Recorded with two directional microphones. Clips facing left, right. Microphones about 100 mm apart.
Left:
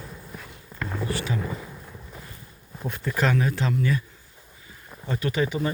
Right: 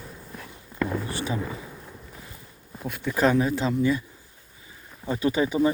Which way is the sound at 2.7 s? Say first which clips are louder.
Even; centre (ahead or behind).